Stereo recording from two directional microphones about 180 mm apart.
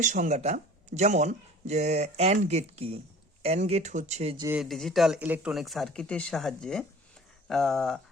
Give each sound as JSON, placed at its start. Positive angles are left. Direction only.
{"t": 0.0, "sound": "speech", "side_deg": -45}
{"t": 4.5, "sound": "speech", "side_deg": 0}